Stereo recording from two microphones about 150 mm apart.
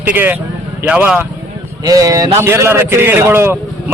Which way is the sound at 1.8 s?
25° right (ahead or behind).